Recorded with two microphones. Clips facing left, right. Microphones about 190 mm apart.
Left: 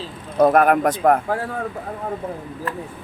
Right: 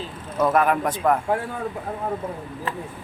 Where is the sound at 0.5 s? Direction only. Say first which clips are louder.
Left 4 dB; 60° left (ahead or behind).